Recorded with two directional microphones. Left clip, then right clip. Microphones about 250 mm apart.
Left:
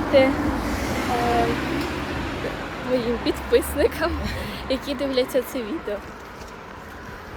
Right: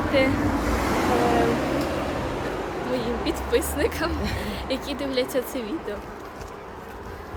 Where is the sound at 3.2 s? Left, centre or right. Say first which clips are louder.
Left 3 dB; centre.